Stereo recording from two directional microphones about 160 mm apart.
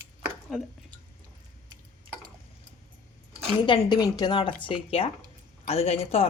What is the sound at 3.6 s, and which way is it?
Speech, 30° left (ahead or behind).